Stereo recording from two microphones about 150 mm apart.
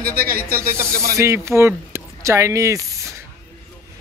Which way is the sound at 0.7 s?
15° right (ahead or behind).